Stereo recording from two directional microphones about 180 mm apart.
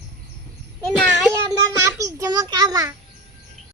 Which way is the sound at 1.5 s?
20° right (ahead or behind).